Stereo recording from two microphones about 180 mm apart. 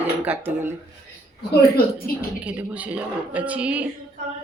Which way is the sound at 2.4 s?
10° right (ahead or behind).